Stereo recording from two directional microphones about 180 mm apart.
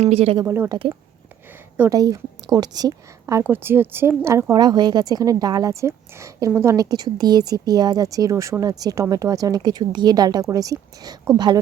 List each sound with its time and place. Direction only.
0.0 s speech: 35° right (ahead or behind)
0.4 s speech: 10° right (ahead or behind)
1.9 s a woman's voice: 20° right (ahead or behind)